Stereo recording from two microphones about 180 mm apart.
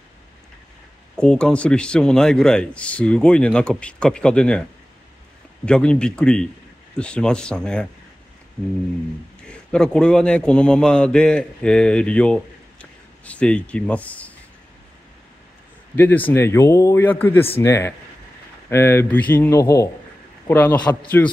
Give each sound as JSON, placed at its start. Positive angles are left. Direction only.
{"t": 1.1, "sound": "a man's voice", "side_deg": 5}
{"t": 5.7, "sound": "a man's voice", "side_deg": 5}
{"t": 9.5, "sound": "a man's voice", "side_deg": 5}
{"t": 16.0, "sound": "a man's voice", "side_deg": 10}
{"t": 20.8, "sound": "a man's voice", "side_deg": 20}